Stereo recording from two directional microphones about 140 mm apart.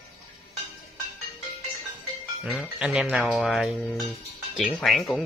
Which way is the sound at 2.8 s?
5° right (ahead or behind).